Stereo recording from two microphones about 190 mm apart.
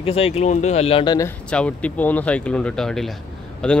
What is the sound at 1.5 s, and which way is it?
Speech, 5° left (ahead or behind).